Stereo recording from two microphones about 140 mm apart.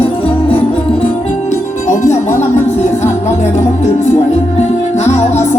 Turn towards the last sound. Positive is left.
turn(degrees=50)  # may be behind; listen again after turning